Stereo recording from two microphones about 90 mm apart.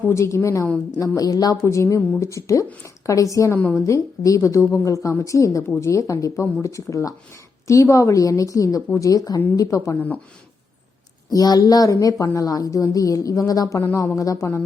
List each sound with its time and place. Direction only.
0.1 s a woman's voice: 30° left (ahead or behind)
0.9 s speech: 45° left (ahead or behind)
1.6 s a woman's voice: 30° left (ahead or behind)
11.3 s a woman's voice: 45° left (ahead or behind)